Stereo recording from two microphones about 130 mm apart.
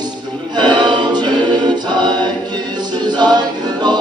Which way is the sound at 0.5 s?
35° right (ahead or behind).